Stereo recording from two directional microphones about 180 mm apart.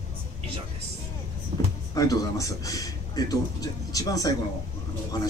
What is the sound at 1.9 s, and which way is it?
A man's voice, 20° left (ahead or behind).